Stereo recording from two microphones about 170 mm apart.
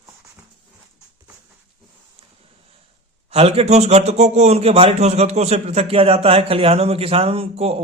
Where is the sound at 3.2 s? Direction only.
35° right (ahead or behind).